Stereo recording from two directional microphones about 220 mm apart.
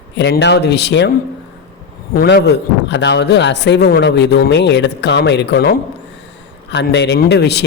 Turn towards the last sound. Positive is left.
turn(degrees=50)  # may be behind; listen again after turning